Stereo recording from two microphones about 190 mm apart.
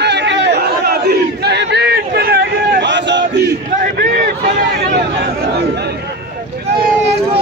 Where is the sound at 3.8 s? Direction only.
45° right (ahead or behind).